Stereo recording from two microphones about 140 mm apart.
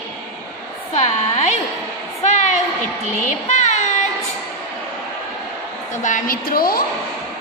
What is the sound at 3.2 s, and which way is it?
Child singing, 60° left (ahead or behind).